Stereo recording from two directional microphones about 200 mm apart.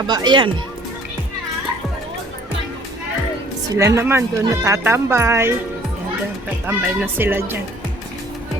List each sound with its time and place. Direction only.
0.1 s speech: 20° right (ahead or behind)
3.8 s speech: 15° right (ahead or behind)
6.7 s speech: 10° right (ahead or behind)